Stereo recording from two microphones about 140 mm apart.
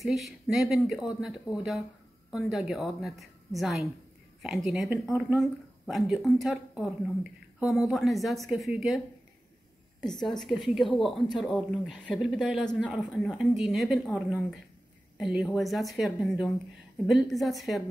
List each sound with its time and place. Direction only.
0.0 s speech: centre (ahead or behind)
7.9 s speech: centre (ahead or behind)
10.0 s speech: centre (ahead or behind)